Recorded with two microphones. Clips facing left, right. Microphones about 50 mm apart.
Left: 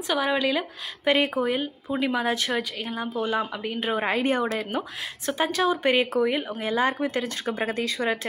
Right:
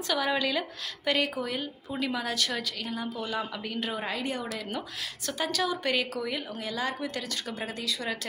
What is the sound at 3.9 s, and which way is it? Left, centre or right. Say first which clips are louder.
Speech: left 11 dB; left.